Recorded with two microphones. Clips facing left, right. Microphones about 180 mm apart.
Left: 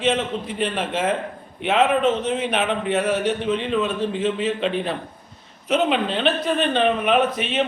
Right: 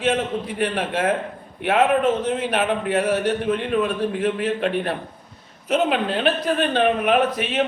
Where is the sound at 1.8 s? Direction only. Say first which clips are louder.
Even; 10° right (ahead or behind).